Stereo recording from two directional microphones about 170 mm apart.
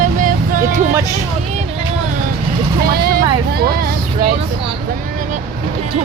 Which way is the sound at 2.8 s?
65° right (ahead or behind).